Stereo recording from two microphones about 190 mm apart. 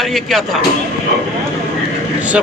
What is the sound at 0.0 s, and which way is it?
Speech, centre (ahead or behind).